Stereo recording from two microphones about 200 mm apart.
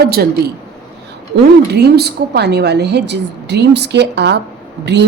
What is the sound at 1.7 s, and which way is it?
Speech, 55° right (ahead or behind).